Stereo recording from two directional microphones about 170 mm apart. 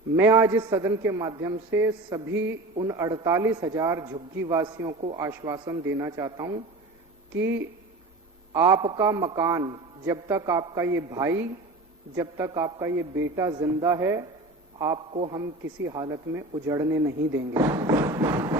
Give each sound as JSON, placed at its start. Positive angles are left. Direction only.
{"t": 0.2, "sound": "a man's voice", "side_deg": -15}
{"t": 15.1, "sound": "a man's voice", "side_deg": -35}
{"t": 15.4, "sound": "a man's voice", "side_deg": -20}